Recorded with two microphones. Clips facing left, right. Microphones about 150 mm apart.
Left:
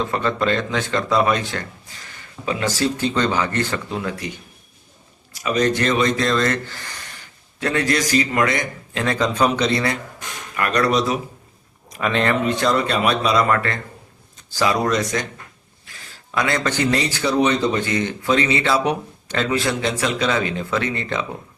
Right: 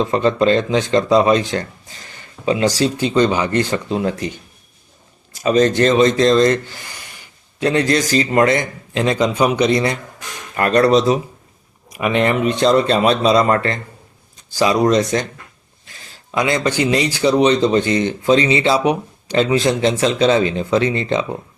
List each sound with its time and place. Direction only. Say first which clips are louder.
0.0 s speech: right 6 dB; 25° right (ahead or behind)
5.4 s speech: right 6 dB; 35° right (ahead or behind); by 7.2 s 10° right (ahead or behind)
7.6 s speech: right 4 dB; 25° right (ahead or behind)
10.5 s speech: right 6 dB; 30° right (ahead or behind)
11.9 s speech: right 3 dB; 15° right (ahead or behind)
15.9 s a sound: right 4 dB; 20° right (ahead or behind)
16.6 s speech: right 3 dB; 15° right (ahead or behind)